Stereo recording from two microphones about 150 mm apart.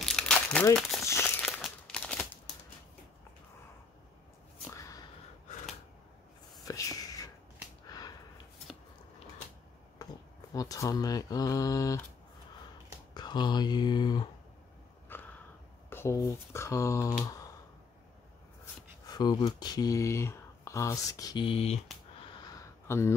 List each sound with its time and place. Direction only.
0.0 s crumpling: 5° left (ahead or behind)
0.7 s speech: centre (ahead or behind)
1.2 s crumpling: 5° left (ahead or behind)
6.6 s whispering: 25° left (ahead or behind)
10.5 s speech: 25° left (ahead or behind)
13.1 s speech: 30° left (ahead or behind)
15.1 s a sound: 15° left (ahead or behind)
15.9 s speech: 20° left (ahead or behind)
19.0 s speech: 25° left (ahead or behind)
22.5 s a sound: 20° left (ahead or behind)